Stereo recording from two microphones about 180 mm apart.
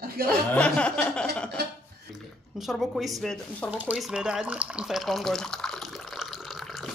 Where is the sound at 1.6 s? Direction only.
65° right (ahead or behind).